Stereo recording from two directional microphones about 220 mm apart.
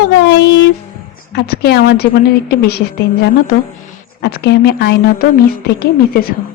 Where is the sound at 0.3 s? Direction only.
50° left (ahead or behind).